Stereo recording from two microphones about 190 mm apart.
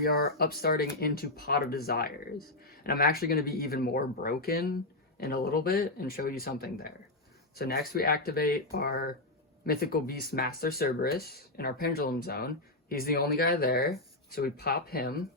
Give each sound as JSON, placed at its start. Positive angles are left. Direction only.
{"t": 0.0, "sound": "speech", "side_deg": 55}